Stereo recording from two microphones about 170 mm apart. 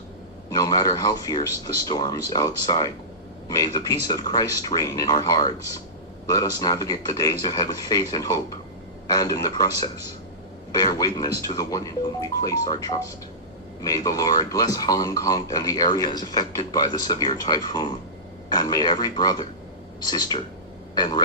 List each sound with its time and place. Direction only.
0.5 s speech: 20° left (ahead or behind)